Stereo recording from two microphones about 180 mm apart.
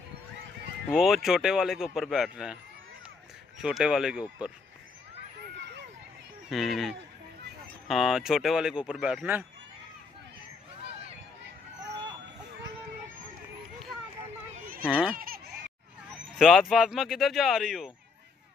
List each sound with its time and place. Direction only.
0.8 s speech: 5° right (ahead or behind)
3.6 s speech: 5° right (ahead or behind)
6.5 s speech: centre (ahead or behind)
14.8 s speech: 5° right (ahead or behind)
15.1 s honk: 55° right (ahead or behind)
16.3 s speech: centre (ahead or behind)